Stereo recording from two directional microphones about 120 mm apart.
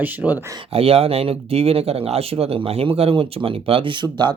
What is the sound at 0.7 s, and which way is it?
Speech, 55° right (ahead or behind).